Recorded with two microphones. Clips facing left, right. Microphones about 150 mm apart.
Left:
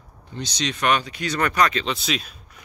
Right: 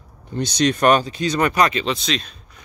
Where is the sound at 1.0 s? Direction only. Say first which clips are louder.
Right 4 dB; 25° right (ahead or behind).